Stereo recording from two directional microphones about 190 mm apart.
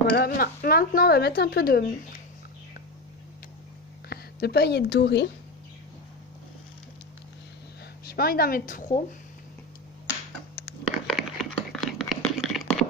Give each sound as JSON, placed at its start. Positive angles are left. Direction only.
{"t": 0.1, "sound": "speech", "side_deg": 50}
{"t": 4.1, "sound": "speech", "side_deg": 55}
{"t": 8.0, "sound": "speech", "side_deg": 55}
{"t": 11.1, "sound": "a sound", "side_deg": 0}